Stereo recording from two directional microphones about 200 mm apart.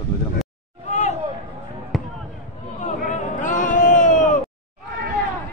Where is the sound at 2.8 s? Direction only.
40° left (ahead or behind).